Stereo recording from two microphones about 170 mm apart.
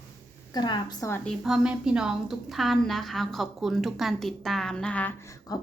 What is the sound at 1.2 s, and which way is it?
A woman's voice, centre (ahead or behind).